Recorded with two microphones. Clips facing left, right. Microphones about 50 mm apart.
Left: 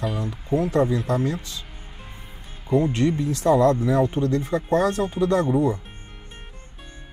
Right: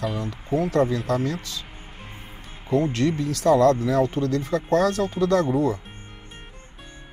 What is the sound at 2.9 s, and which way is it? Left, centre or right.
Speech, left.